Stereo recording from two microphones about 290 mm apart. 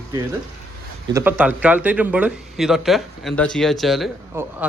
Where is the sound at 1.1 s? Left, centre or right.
Centre.